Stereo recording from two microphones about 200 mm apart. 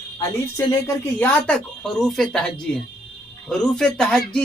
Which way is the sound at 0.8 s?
5° left (ahead or behind).